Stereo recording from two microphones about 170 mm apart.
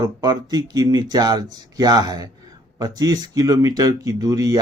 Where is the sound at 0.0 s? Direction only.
25° right (ahead or behind).